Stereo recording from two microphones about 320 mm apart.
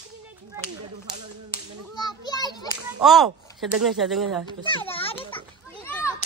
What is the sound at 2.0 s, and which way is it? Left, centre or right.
Children playing, centre.